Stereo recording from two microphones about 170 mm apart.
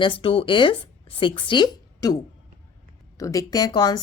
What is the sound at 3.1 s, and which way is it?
Speech, 20° left (ahead or behind).